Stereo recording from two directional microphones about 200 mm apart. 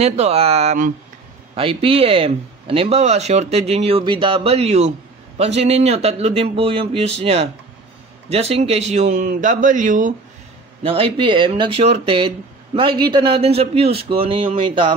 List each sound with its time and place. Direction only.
0.0 s speech: 30° right (ahead or behind)
10.8 s speech: 25° right (ahead or behind)